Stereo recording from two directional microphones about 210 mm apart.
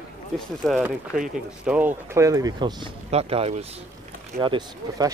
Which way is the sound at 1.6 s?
10° right (ahead or behind).